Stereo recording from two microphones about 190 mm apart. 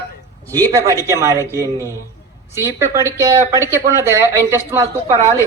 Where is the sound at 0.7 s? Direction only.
15° right (ahead or behind).